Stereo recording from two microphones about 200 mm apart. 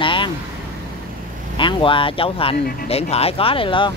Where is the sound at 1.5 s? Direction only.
25° left (ahead or behind).